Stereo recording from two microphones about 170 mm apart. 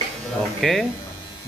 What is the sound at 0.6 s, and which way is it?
Speech, 5° left (ahead or behind).